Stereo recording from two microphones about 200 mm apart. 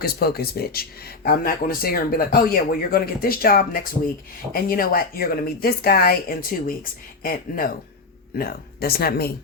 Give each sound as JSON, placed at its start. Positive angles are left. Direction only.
{"t": 0.0, "sound": "speech", "side_deg": 50}